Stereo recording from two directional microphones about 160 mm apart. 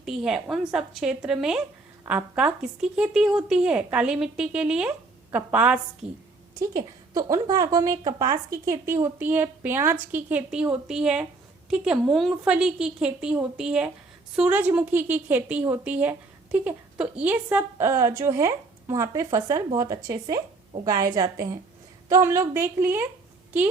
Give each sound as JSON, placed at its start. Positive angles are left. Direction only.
{"t": 0.0, "sound": "a woman's voice", "side_deg": -5}
{"t": 6.0, "sound": "a woman's voice", "side_deg": -45}
{"t": 6.6, "sound": "a woman's voice", "side_deg": -20}